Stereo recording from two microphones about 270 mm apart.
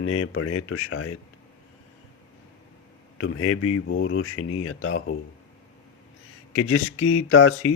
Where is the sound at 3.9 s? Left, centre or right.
Left.